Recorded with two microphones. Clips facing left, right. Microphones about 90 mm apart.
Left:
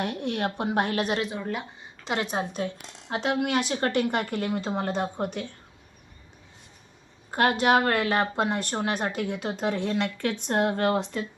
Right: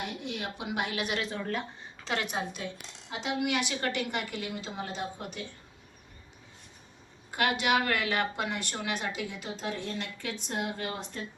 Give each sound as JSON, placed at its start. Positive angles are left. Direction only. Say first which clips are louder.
{"t": 0.0, "sound": "a woman's voice", "louder": "left 8 dB", "side_deg": 55}
{"t": 1.2, "sound": "speech", "louder": "left 3 dB", "side_deg": 15}
{"t": 2.0, "sound": "a woman's voice", "louder": "left 4 dB", "side_deg": 25}
{"t": 2.4, "sound": "speech", "louder": "left 7 dB", "side_deg": 40}
{"t": 3.1, "sound": "a woman's voice", "louder": "left 5 dB", "side_deg": 55}
{"t": 7.3, "sound": "speech", "louder": "left 6 dB", "side_deg": 35}
{"t": 9.2, "sound": "speech", "louder": "left 8 dB", "side_deg": 65}